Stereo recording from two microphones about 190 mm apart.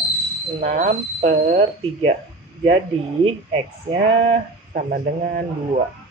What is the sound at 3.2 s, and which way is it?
Speech, 30° right (ahead or behind).